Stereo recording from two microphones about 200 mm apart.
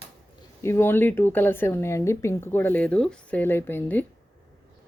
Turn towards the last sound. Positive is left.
turn(degrees=10)  # may be behind; listen again after turning